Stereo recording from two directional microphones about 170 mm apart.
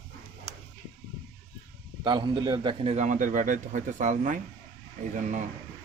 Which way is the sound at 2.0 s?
25° right (ahead or behind).